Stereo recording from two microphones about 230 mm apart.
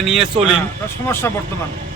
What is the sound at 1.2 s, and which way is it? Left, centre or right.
Speech, centre.